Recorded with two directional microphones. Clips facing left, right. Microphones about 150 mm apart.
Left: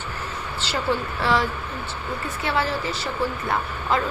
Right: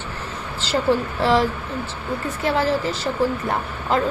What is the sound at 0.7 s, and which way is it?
A woman's voice, 35° right (ahead or behind).